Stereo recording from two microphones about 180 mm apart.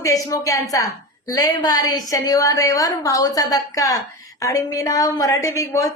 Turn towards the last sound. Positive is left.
turn(degrees=15)  # may be behind; listen again after turning